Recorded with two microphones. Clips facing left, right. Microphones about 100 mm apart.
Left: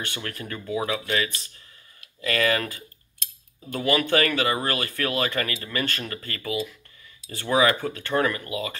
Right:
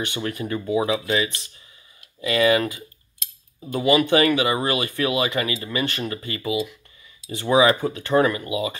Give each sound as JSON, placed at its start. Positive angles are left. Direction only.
{"t": 0.0, "sound": "speech", "side_deg": -15}
{"t": 3.6, "sound": "speech", "side_deg": -15}